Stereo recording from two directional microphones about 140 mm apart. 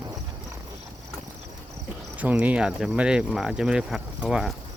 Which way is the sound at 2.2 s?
10° right (ahead or behind).